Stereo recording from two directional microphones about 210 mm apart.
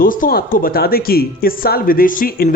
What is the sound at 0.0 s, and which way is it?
Speech, 40° left (ahead or behind).